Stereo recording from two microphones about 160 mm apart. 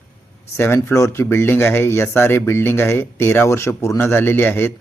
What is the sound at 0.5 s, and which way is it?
Speech, 15° left (ahead or behind).